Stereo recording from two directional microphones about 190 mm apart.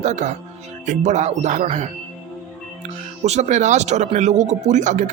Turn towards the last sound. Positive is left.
turn(degrees=-40)  # may be behind; listen again after turning